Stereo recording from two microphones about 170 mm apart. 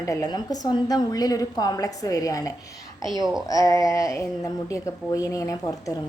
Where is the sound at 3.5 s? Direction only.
20° left (ahead or behind).